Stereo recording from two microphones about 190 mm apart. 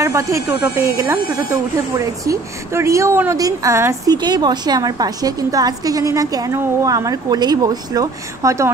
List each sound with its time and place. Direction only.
0.0 s speech: 15° right (ahead or behind)